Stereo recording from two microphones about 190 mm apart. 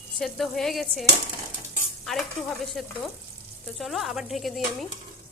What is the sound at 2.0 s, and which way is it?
Stir, centre (ahead or behind).